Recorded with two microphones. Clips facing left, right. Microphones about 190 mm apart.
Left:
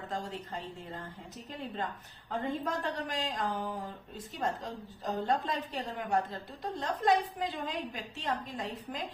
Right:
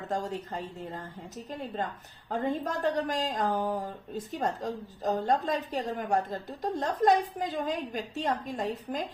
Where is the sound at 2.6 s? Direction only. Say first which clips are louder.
Right 6 dB; 45° right (ahead or behind).